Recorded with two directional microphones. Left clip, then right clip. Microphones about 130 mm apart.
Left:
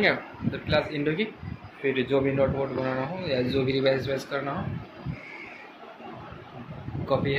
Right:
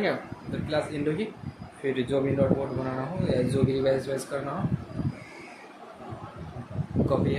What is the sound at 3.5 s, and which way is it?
Speech, 15° right (ahead or behind).